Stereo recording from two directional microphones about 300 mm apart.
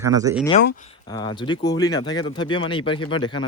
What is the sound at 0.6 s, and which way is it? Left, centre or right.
Speech, left.